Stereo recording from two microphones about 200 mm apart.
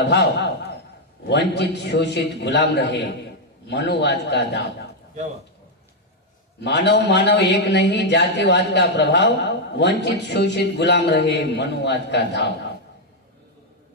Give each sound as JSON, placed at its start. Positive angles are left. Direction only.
{"t": 0.0, "sound": "a man's voice", "side_deg": 60}
{"t": 6.6, "sound": "a man's voice", "side_deg": 60}